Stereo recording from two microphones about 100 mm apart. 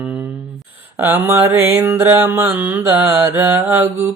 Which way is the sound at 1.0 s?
20° right (ahead or behind).